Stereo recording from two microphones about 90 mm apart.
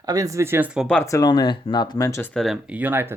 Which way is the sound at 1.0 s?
40° left (ahead or behind).